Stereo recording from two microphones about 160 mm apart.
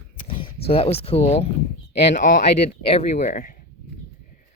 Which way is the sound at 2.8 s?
40° left (ahead or behind).